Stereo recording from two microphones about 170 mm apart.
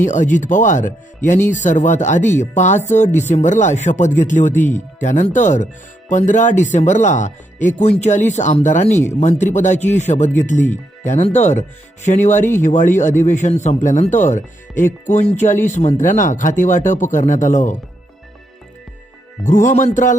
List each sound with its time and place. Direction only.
0.0 s speech: 50° left (ahead or behind)
19.5 s speech: 50° left (ahead or behind)